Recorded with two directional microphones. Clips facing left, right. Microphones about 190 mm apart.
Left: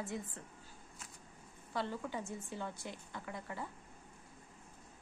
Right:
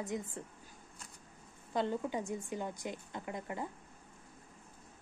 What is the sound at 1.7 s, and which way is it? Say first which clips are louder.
A woman's voice: right 5 dB; 20° right (ahead or behind).